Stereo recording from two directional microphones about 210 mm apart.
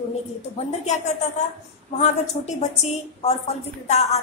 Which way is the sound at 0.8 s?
35° left (ahead or behind).